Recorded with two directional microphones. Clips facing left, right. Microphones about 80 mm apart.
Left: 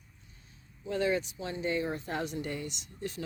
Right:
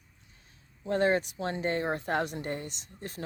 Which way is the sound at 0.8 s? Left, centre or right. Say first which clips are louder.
Right 4 dB; right.